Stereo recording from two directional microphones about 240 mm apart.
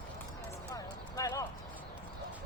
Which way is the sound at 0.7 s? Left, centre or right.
Centre.